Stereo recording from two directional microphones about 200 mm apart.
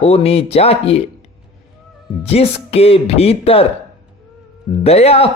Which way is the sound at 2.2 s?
30° left (ahead or behind).